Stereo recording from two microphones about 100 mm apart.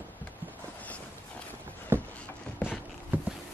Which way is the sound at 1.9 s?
25° right (ahead or behind).